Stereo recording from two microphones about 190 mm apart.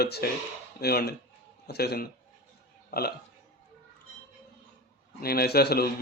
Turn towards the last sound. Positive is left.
turn(degrees=55)  # may be behind; listen again after turning